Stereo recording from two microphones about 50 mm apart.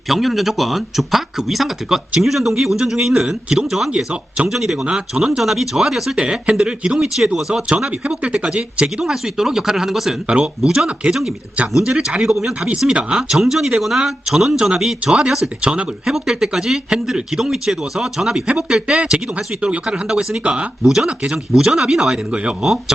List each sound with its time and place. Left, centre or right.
0.1 s speech: centre
4.4 s speech: centre
6.4 s speech: centre
8.2 s speech: right; by 10.2 s centre
10.6 s speech: centre
16.0 s speech: centre
20.4 s speech: right
20.8 s speech: centre
22.3 s speech: right